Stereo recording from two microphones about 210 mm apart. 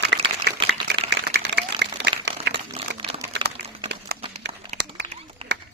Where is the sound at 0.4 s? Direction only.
55° right (ahead or behind).